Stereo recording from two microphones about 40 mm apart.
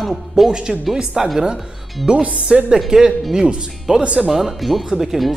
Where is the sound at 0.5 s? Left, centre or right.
Right.